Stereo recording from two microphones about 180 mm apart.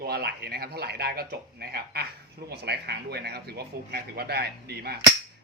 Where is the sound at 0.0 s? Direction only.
60° right (ahead or behind).